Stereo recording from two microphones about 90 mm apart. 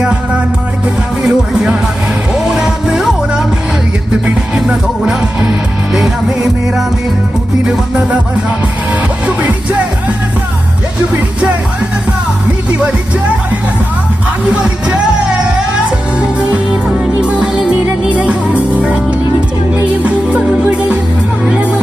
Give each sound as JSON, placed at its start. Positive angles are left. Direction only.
{"t": 0.0, "sound": "music", "side_deg": -10}
{"t": 4.5, "sound": "music", "side_deg": -5}
{"t": 14.5, "sound": "music", "side_deg": -10}
{"t": 17.2, "sound": "music", "side_deg": -10}
{"t": 20.1, "sound": "music", "side_deg": -15}